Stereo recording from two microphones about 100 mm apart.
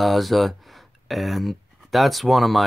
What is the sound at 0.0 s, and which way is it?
Speech, centre (ahead or behind).